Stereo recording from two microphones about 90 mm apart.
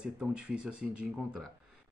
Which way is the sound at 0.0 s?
10° right (ahead or behind).